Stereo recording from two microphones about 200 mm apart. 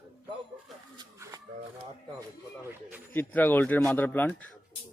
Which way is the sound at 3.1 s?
10° left (ahead or behind).